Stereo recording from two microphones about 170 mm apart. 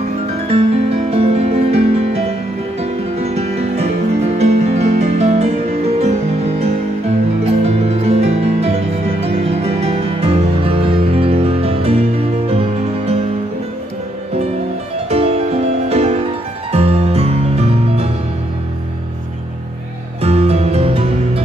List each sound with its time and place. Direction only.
0.5 s music: 35° right (ahead or behind)
15.0 s music: 35° right (ahead or behind)
20.2 s music: 35° right (ahead or behind)